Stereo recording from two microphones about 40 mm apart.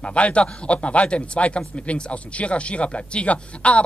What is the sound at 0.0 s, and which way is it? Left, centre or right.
A man's voice, left.